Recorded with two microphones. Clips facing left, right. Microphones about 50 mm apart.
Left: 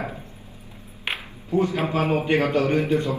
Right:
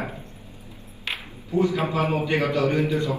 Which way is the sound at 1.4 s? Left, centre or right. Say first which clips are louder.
Even; left.